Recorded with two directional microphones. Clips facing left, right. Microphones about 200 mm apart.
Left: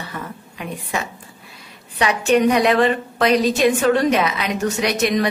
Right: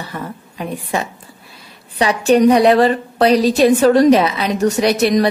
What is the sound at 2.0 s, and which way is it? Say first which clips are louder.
A woman's voice: right 4 dB; 35° right (ahead or behind).